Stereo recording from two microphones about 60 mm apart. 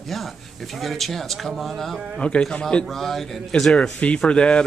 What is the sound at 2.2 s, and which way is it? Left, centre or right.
Speech, centre.